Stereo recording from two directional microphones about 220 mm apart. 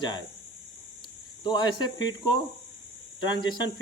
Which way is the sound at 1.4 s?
20° left (ahead or behind).